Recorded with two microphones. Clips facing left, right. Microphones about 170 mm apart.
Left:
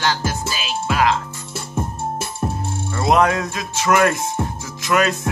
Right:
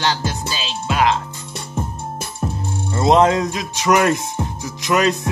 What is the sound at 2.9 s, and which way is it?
Music, 25° right (ahead or behind).